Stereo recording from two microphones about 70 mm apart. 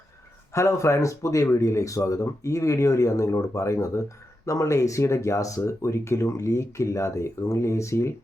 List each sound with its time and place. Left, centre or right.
0.5 s speech: left